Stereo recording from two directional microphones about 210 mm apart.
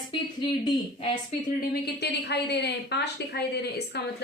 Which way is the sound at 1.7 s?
50° left (ahead or behind).